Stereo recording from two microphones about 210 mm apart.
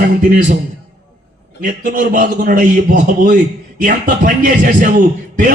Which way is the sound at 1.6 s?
40° right (ahead or behind).